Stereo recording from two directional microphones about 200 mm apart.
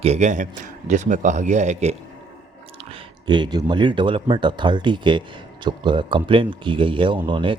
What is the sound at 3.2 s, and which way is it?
Speech, 20° right (ahead or behind).